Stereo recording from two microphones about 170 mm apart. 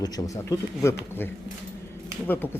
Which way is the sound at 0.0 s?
15° left (ahead or behind).